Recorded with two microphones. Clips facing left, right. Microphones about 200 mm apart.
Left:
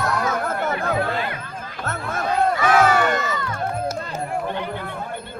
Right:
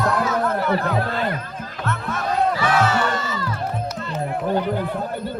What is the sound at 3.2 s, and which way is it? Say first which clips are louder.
Music: left 1 dB; 30° right (ahead or behind).